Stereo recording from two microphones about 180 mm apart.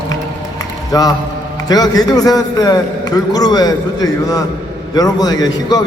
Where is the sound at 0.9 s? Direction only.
20° left (ahead or behind).